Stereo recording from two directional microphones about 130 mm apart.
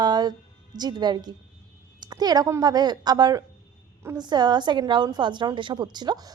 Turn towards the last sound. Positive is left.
turn(degrees=-30)  # may be behind; listen again after turning